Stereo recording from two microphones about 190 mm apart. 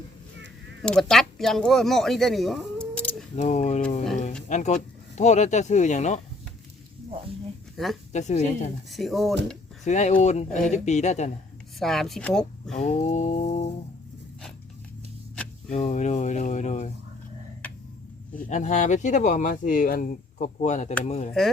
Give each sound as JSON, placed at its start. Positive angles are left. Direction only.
{"t": 0.8, "sound": "speech", "side_deg": 5}
{"t": 3.3, "sound": "speech", "side_deg": 40}
{"t": 8.1, "sound": "speech", "side_deg": 40}
{"t": 8.9, "sound": "speech", "side_deg": 0}
{"t": 9.8, "sound": "speech", "side_deg": 40}
{"t": 11.8, "sound": "speech", "side_deg": 0}
{"t": 12.7, "sound": "speech", "side_deg": 40}
{"t": 15.7, "sound": "speech", "side_deg": 35}
{"t": 18.3, "sound": "speech", "side_deg": 40}